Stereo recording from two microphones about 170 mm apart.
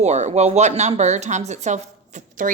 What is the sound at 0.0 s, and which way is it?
Speech, 40° right (ahead or behind).